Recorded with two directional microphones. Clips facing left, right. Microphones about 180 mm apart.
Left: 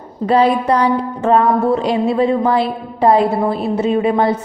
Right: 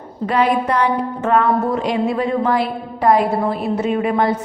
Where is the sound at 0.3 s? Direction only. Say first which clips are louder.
Left 4 dB; 30° left (ahead or behind).